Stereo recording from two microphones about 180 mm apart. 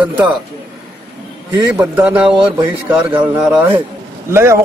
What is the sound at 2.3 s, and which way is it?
Speech, 30° right (ahead or behind).